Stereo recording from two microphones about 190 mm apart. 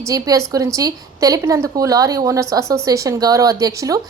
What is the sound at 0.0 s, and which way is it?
A woman's voice, 15° right (ahead or behind).